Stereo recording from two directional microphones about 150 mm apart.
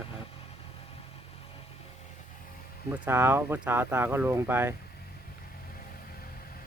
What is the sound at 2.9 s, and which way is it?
Speech, 15° right (ahead or behind).